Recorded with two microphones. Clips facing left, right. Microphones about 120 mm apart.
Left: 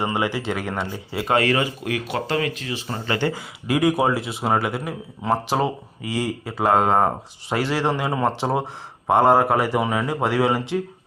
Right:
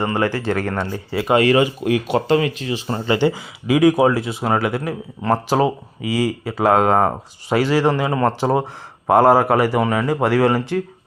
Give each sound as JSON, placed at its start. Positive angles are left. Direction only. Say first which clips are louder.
{"t": 0.0, "sound": "speech", "louder": "right 4 dB", "side_deg": 10}
{"t": 1.3, "sound": "speech", "louder": "right 5 dB", "side_deg": -20}
{"t": 3.3, "sound": "speech", "louder": "right 5 dB", "side_deg": 0}